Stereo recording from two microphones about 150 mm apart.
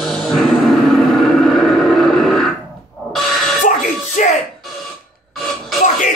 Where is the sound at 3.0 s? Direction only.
Centre (ahead or behind).